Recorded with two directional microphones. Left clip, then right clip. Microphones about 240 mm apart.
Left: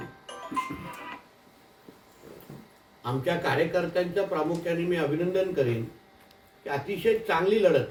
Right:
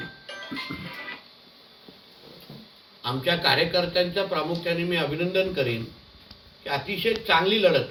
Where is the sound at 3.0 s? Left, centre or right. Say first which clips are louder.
Right 4 dB; centre.